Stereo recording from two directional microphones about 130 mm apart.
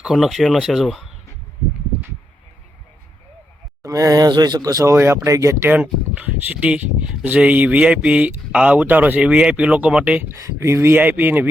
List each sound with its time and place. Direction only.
0.0 s speech: centre (ahead or behind)
3.8 s speech: 25° right (ahead or behind); by 10.2 s 10° right (ahead or behind)
10.6 s speech: 20° right (ahead or behind)